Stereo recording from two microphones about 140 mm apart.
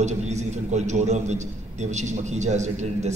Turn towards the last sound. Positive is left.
turn(degrees=-55)  # may be behind; listen again after turning